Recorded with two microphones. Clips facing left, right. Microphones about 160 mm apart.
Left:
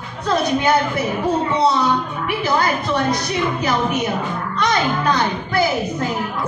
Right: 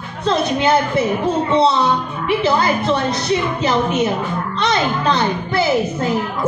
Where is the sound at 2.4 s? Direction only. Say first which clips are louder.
Right 1 dB; 25° right (ahead or behind).